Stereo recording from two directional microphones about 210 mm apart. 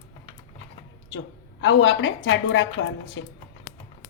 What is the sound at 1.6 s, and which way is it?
A woman's voice, 70° left (ahead or behind).